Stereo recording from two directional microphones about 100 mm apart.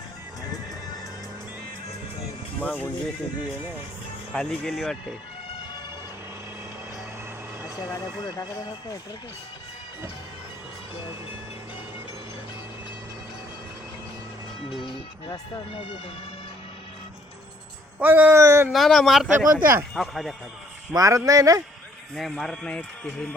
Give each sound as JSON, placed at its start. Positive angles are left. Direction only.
{"t": 2.6, "sound": "speech", "side_deg": 15}
{"t": 4.3, "sound": "speech", "side_deg": 5}
{"t": 8.2, "sound": "speech", "side_deg": 45}
{"t": 14.8, "sound": "speech", "side_deg": 50}
{"t": 18.0, "sound": "speech", "side_deg": -20}
{"t": 18.7, "sound": "speech", "side_deg": 0}
{"t": 20.9, "sound": "speech", "side_deg": -35}
{"t": 22.1, "sound": "speech", "side_deg": 0}